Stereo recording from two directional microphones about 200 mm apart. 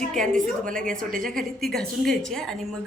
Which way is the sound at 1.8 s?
Centre (ahead or behind).